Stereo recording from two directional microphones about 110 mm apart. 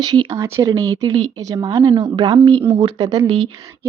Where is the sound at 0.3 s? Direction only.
25° right (ahead or behind).